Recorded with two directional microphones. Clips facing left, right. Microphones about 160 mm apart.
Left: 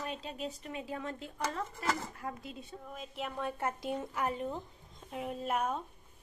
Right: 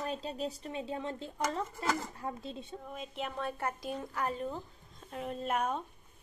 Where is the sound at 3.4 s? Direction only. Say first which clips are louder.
Left 3 dB; 20° left (ahead or behind).